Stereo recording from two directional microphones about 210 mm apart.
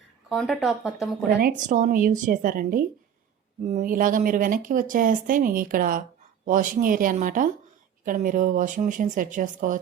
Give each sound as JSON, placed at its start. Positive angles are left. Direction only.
{"t": 0.3, "sound": "speech", "side_deg": 0}
{"t": 1.4, "sound": "speech", "side_deg": -40}